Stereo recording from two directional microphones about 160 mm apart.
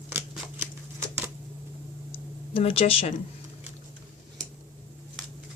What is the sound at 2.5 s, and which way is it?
Speech, 35° left (ahead or behind).